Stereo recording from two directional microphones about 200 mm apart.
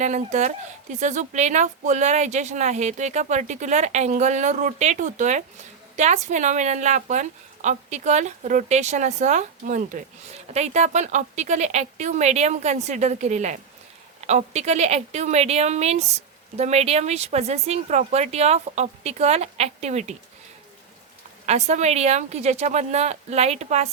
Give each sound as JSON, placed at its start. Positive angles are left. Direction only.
{"t": 0.0, "sound": "a woman's voice", "side_deg": -35}
{"t": 21.4, "sound": "a woman's voice", "side_deg": -35}